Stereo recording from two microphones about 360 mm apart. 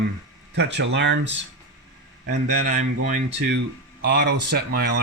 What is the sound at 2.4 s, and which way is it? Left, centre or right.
Speech, right.